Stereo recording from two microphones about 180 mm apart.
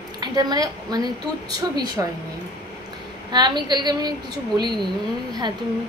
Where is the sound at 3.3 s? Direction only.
25° right (ahead or behind).